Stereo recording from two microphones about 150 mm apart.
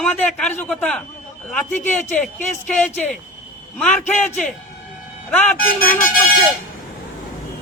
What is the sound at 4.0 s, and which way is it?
Speech, 55° left (ahead or behind).